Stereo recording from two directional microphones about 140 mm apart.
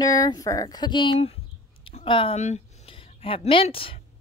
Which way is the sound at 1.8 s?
40° left (ahead or behind).